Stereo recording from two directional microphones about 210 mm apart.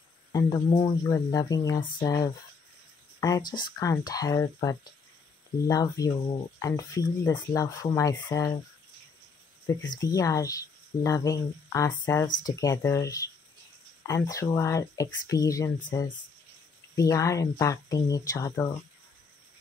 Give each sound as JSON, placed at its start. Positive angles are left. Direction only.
{"t": 0.3, "sound": "speech", "side_deg": 20}
{"t": 9.7, "sound": "speech", "side_deg": 15}